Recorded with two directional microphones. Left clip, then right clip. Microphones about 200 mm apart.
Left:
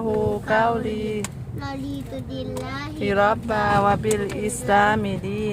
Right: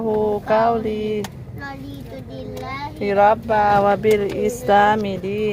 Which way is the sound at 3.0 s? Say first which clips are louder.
Right 5 dB; centre (ahead or behind).